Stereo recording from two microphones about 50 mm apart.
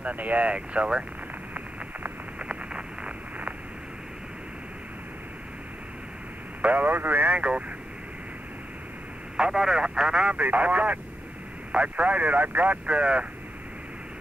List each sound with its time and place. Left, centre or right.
0.0 s speech: right
2.3 s a sound: right
6.6 s speech: right
9.4 s speech: centre